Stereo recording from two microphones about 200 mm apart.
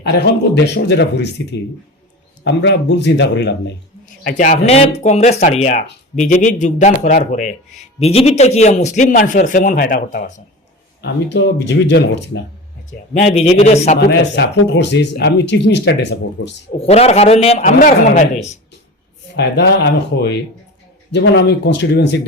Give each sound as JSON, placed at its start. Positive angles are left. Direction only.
{"t": 0.0, "sound": "speech", "side_deg": 55}
{"t": 4.2, "sound": "speech", "side_deg": 45}
{"t": 11.0, "sound": "speech", "side_deg": 55}
{"t": 12.9, "sound": "speech", "side_deg": 35}
{"t": 14.0, "sound": "speech", "side_deg": 55}
{"t": 16.8, "sound": "speech", "side_deg": 30}
{"t": 19.4, "sound": "speech", "side_deg": 60}